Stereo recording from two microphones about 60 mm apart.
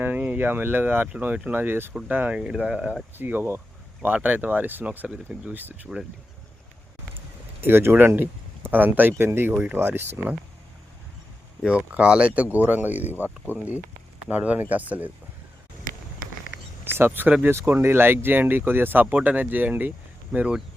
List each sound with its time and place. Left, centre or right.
0.0 s speech: right
2.3 s speech: centre
3.2 s speech: right
4.9 s speech: right
5.5 s speech: right
7.6 s speech: right
11.9 s speech: centre
16.8 s a sound: right
17.7 s speech: right